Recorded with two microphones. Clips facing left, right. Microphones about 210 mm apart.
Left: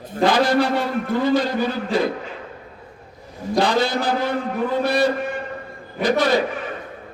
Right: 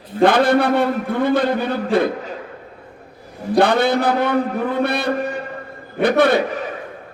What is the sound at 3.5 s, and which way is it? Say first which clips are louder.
A man's voice: right 4 dB; 60° right (ahead or behind).